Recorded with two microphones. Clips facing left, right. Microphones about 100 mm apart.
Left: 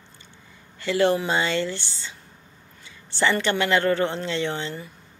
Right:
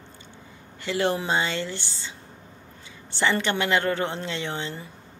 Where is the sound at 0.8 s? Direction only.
20° right (ahead or behind).